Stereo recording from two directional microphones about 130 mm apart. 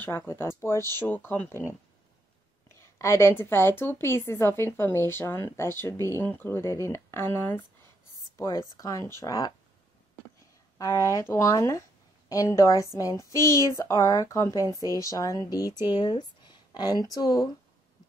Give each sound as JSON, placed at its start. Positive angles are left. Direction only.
{"t": 0.0, "sound": "a woman's voice", "side_deg": 15}
{"t": 2.8, "sound": "a woman's voice", "side_deg": 20}
{"t": 10.8, "sound": "a woman's voice", "side_deg": 25}